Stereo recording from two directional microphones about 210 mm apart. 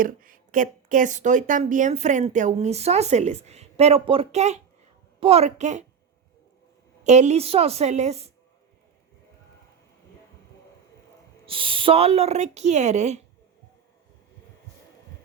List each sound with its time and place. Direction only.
0.0 s a woman's voice: 40° right (ahead or behind)
7.0 s a woman's voice: 35° right (ahead or behind)
11.4 s a woman's voice: 25° right (ahead or behind)